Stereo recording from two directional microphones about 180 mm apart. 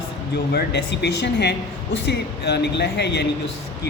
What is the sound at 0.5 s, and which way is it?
Speech, 65° left (ahead or behind).